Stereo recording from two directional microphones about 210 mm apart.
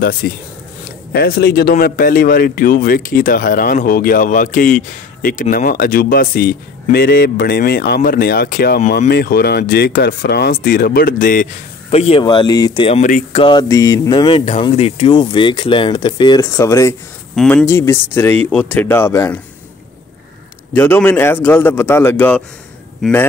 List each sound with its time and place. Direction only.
0.0 s speech: 45° left (ahead or behind)
11.9 s speech: 30° left (ahead or behind)
13.0 s speech: 40° left (ahead or behind)
13.4 s speech: 20° left (ahead or behind)
20.7 s speech: 10° left (ahead or behind)